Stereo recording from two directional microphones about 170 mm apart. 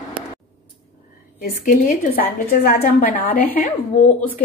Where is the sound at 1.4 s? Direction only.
60° left (ahead or behind).